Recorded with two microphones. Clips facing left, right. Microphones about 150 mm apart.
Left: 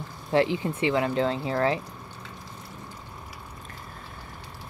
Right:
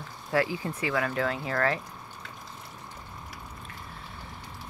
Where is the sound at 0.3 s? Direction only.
25° left (ahead or behind).